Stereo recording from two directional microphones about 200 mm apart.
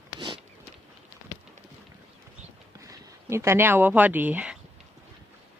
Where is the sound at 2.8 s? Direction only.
15° right (ahead or behind).